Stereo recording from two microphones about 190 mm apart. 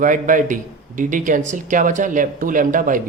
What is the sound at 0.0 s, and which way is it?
Speech, 45° right (ahead or behind).